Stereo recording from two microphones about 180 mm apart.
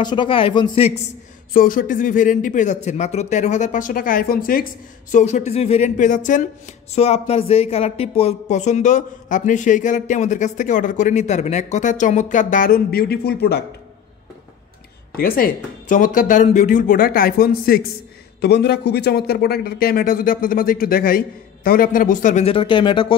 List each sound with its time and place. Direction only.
0.0 s a man's voice: 25° left (ahead or behind)
1.5 s speech: 50° left (ahead or behind)
5.1 s speech: 40° left (ahead or behind); by 13.7 s 65° left (ahead or behind)
15.1 s speech: 55° left (ahead or behind)
18.4 s speech: 70° left (ahead or behind); by 23.1 s 30° left (ahead or behind)